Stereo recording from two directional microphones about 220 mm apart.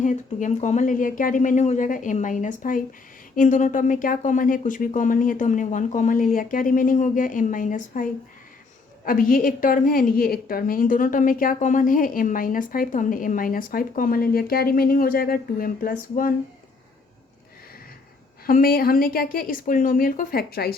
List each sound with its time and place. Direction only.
0.0 s a woman's voice: 35° left (ahead or behind)
18.4 s a woman's voice: 40° left (ahead or behind)